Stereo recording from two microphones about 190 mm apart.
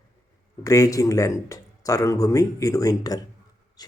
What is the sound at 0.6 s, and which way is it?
Speech, 15° left (ahead or behind).